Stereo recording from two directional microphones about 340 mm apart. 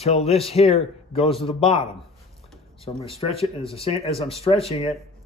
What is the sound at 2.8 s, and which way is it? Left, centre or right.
Speech, centre.